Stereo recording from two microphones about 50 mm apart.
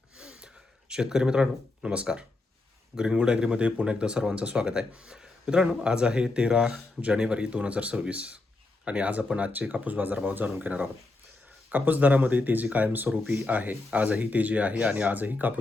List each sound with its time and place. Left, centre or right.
0.2 s gasp: centre
2.9 s speech: centre; by 15.5 s right